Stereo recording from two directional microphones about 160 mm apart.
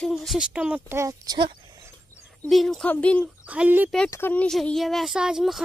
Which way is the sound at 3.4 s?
10° right (ahead or behind).